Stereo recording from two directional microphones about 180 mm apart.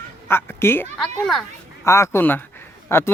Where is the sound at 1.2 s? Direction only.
Centre (ahead or behind).